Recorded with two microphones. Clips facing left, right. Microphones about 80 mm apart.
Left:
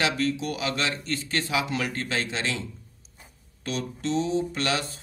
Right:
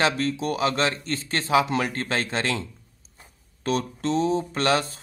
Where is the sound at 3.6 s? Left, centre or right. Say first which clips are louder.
Right 4 dB; right.